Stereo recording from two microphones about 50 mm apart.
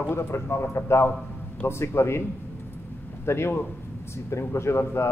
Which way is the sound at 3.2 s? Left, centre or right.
Left.